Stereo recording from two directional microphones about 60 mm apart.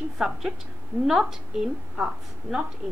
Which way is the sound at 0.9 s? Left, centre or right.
Right.